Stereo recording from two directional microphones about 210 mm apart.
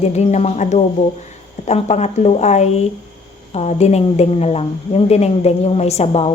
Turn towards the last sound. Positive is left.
turn(degrees=30)  # may be behind; listen again after turning